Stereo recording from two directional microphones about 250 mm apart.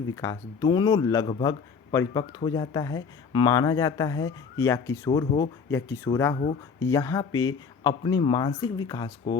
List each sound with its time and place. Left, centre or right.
0.2 s speech: centre